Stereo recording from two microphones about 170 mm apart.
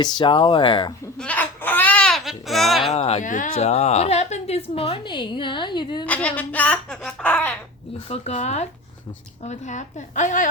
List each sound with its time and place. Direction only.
0.0 s speech: 25° left (ahead or behind)
1.2 s baby cry: 10° left (ahead or behind)
2.9 s a woman's voice: 40° left (ahead or behind)
3.6 s a woman's voice: 40° left (ahead or behind)
6.1 s speech: 10° left (ahead or behind)
7.9 s a woman's voice: 40° left (ahead or behind)